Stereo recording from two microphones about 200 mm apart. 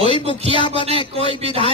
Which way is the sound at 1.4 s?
30° right (ahead or behind).